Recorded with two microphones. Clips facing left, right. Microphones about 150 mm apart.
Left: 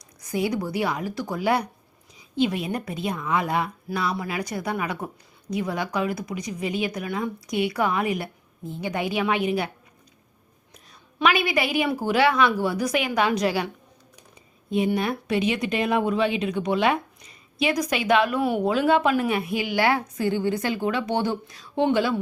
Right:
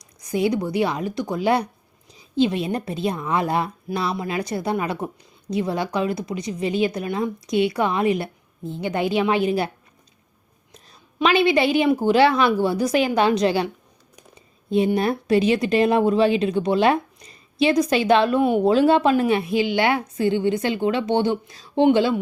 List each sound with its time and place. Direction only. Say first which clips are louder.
0.2 s speech: right 4 dB; 20° right (ahead or behind)
11.2 s speech: right 5 dB; 25° right (ahead or behind)
14.9 s speech: right 5 dB; 35° right (ahead or behind)